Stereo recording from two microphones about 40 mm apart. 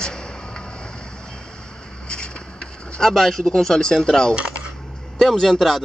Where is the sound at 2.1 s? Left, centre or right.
Left.